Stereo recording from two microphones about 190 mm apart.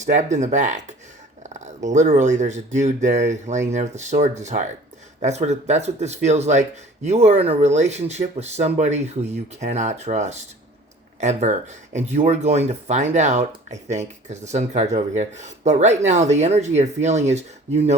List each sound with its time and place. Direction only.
0.0 s speech: 40° right (ahead or behind)